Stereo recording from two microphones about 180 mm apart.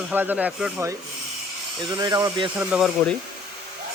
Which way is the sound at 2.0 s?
20° right (ahead or behind).